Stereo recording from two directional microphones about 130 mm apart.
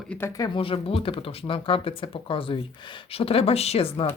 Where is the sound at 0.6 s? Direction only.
45° left (ahead or behind).